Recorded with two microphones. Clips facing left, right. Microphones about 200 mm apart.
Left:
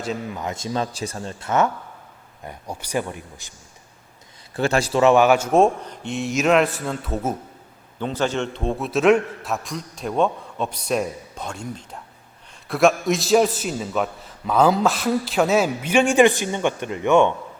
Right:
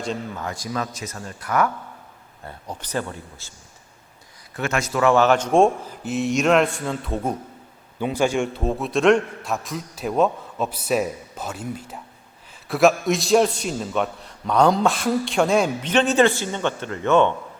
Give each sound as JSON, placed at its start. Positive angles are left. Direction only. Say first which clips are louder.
{"t": 0.3, "sound": "speech", "louder": "left 2 dB", "side_deg": 20}
{"t": 2.4, "sound": "a man's voice", "louder": "left 1 dB", "side_deg": 15}
{"t": 4.5, "sound": "a man's voice", "louder": "left 4 dB", "side_deg": 30}
{"t": 7.9, "sound": "a man's voice", "louder": "right 2 dB", "side_deg": -10}